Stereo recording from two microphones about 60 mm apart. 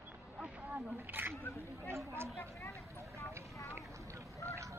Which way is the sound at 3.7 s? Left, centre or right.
Right.